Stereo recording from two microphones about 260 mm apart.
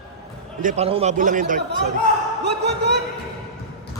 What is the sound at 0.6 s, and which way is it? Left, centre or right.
A man's voice, right.